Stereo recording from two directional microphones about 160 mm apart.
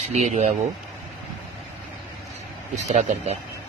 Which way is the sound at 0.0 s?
45° right (ahead or behind).